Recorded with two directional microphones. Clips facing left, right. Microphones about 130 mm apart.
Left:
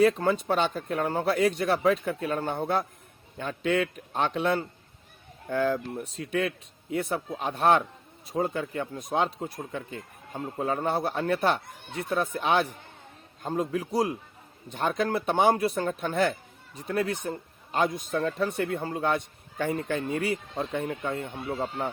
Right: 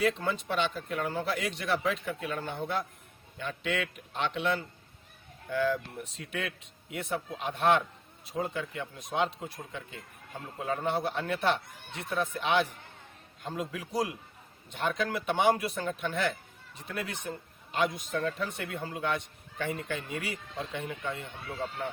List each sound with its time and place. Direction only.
0.0 s a man's voice: 45° left (ahead or behind)